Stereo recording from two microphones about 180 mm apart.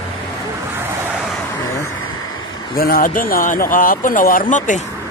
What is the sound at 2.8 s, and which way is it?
Speech, 55° left (ahead or behind).